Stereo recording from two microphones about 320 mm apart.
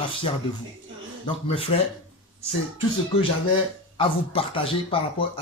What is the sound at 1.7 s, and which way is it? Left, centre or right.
Speech, centre.